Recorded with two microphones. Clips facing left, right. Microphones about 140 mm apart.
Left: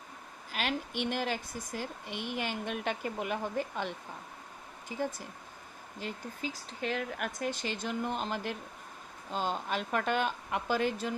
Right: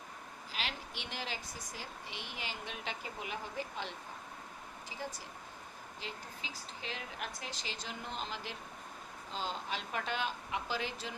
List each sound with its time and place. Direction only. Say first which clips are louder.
0.5 s speech: left 9 dB; 55° left (ahead or behind)